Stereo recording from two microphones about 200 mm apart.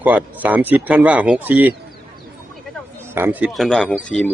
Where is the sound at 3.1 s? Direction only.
10° right (ahead or behind).